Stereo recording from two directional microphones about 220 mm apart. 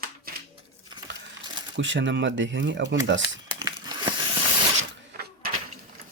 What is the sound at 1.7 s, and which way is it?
Speech, 55° right (ahead or behind).